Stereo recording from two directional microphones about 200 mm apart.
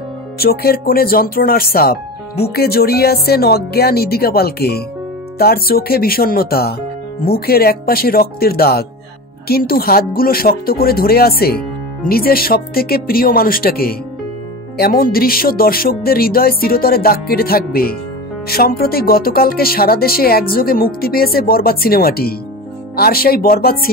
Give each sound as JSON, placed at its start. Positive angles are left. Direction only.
{"t": 0.4, "sound": "speech", "side_deg": 50}